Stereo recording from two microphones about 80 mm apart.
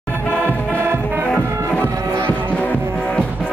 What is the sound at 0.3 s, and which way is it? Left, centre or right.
Music, centre.